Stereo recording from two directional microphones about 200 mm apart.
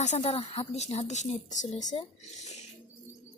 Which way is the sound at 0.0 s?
35° left (ahead or behind).